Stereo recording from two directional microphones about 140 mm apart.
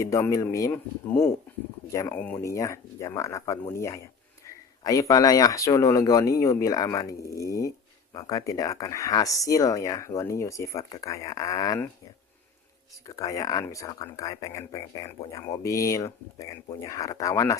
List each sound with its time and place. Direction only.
0.0 s speech: 20° left (ahead or behind)
13.1 s speech: 25° left (ahead or behind)